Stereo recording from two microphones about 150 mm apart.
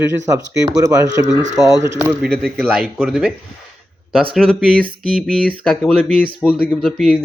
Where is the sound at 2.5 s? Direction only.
Centre (ahead or behind).